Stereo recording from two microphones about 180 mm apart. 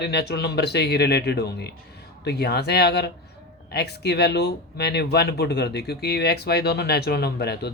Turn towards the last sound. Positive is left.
turn(degrees=65)  # may be behind; listen again after turning